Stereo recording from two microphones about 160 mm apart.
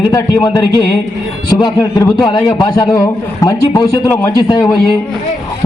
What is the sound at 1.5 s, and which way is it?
A man's voice, 25° left (ahead or behind).